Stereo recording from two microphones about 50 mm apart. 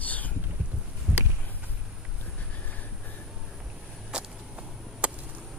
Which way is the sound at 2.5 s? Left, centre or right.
Left.